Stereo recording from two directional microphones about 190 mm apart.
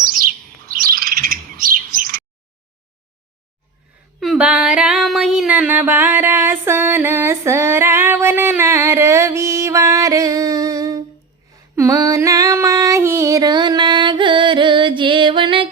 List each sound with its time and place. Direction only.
0.1 s bird: 50° right (ahead or behind)
4.2 s a sound: 5° right (ahead or behind)
11.8 s female singing: 15° right (ahead or behind)